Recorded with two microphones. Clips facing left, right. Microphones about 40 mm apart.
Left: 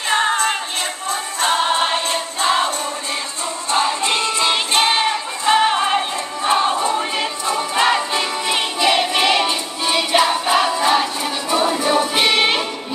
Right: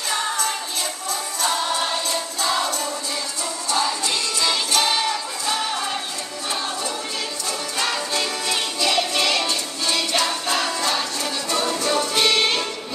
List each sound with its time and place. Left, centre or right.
0.1 s music: left
1.4 s choir: left
3.7 s music: left